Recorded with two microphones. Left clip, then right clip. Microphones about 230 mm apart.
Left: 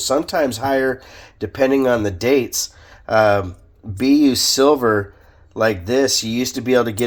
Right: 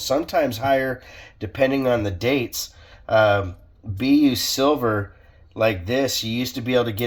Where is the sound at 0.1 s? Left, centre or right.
Left.